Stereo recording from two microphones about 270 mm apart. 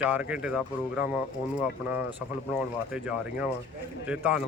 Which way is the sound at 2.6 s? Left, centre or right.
Centre.